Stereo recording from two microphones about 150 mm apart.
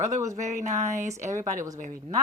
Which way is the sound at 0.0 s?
20° right (ahead or behind).